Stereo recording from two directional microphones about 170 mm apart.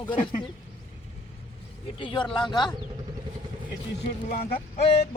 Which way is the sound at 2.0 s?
30° left (ahead or behind).